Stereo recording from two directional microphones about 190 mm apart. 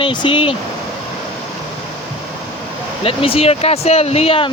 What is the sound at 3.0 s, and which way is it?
Speech, 30° left (ahead or behind).